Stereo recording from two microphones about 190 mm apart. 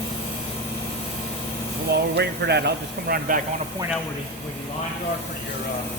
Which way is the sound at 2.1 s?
60° right (ahead or behind).